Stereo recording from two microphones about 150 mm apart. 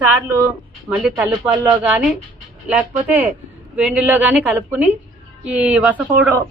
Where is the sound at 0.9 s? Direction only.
10° right (ahead or behind).